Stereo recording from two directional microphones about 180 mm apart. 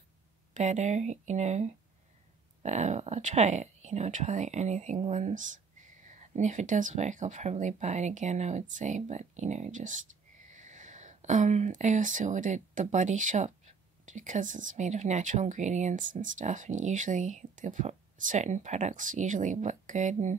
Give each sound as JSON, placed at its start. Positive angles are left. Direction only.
{"t": 0.6, "sound": "speech", "side_deg": -40}